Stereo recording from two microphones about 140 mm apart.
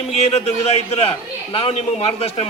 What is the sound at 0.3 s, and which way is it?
Speech, 50° left (ahead or behind).